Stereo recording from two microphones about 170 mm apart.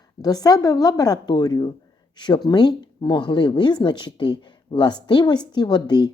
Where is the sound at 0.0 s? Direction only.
20° left (ahead or behind).